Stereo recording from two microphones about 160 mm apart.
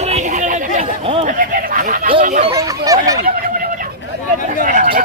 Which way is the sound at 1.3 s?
55° right (ahead or behind).